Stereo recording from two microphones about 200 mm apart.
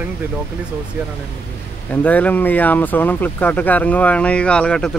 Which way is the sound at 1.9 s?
5° left (ahead or behind).